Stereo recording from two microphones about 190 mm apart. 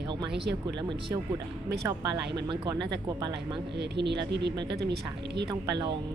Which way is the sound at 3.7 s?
60° right (ahead or behind).